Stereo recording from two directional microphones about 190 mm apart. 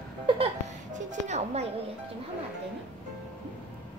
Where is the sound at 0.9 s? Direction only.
35° right (ahead or behind).